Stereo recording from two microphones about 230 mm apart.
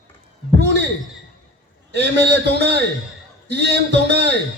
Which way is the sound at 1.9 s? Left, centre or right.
Right.